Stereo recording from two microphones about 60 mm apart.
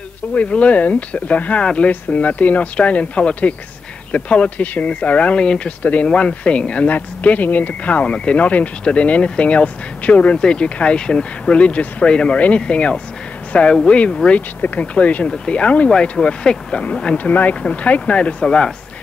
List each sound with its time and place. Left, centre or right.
0.3 s speech: left
17.2 s speech: left